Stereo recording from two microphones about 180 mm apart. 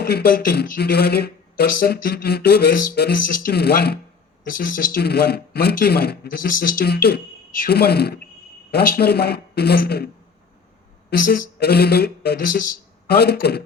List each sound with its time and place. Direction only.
0.0 s speech: 60° left (ahead or behind)
4.4 s speech: 50° left (ahead or behind)
11.1 s speech: 50° left (ahead or behind)
13.1 s speech: 65° left (ahead or behind)